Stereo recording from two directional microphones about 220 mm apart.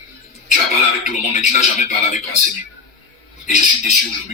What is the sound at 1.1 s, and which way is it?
A man's voice, 35° left (ahead or behind).